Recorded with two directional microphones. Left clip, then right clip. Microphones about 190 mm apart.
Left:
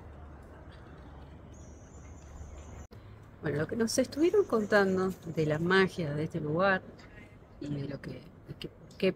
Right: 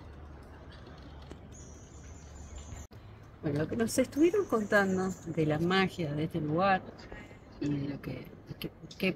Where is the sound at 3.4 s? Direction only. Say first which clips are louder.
Left 1 dB; 10° left (ahead or behind).